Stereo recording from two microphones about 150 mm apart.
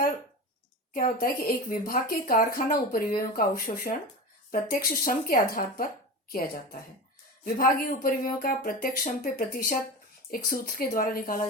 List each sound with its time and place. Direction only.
0.9 s speech: 70° left (ahead or behind)
7.4 s speech: 70° left (ahead or behind)